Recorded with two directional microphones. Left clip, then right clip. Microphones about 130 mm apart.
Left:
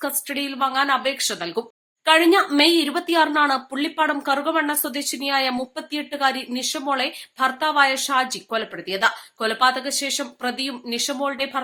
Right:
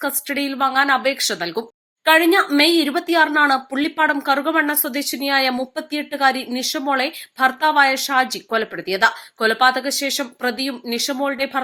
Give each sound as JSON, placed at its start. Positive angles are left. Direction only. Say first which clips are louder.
{"t": 0.0, "sound": "speech", "louder": "right 4 dB", "side_deg": -25}